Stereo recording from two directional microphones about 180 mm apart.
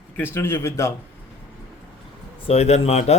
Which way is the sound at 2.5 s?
35° left (ahead or behind).